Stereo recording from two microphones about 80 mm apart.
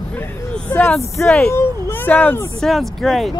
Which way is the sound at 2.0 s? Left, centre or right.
Left.